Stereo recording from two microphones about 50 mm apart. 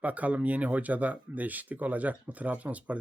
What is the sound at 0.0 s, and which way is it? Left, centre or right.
Speech, right.